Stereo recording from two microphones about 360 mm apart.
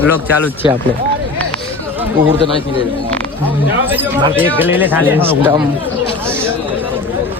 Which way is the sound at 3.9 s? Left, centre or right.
Centre.